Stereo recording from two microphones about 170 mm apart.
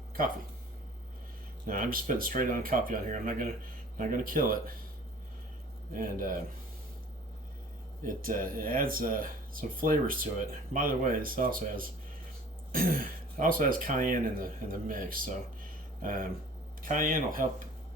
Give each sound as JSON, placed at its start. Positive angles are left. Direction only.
{"t": 1.6, "sound": "speech", "side_deg": -55}
{"t": 5.9, "sound": "speech", "side_deg": -55}
{"t": 8.0, "sound": "speech", "side_deg": -55}